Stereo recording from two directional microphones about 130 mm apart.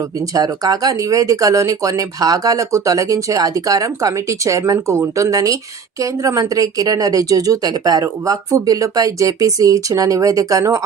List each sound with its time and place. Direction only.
0.3 s speech: 30° right (ahead or behind)